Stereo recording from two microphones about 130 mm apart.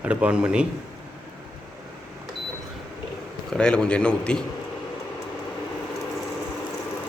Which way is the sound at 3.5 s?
5° left (ahead or behind).